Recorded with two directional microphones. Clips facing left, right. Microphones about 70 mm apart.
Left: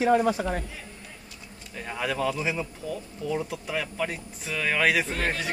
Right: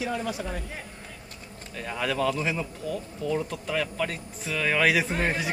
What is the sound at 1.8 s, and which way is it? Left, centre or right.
A man's voice, centre.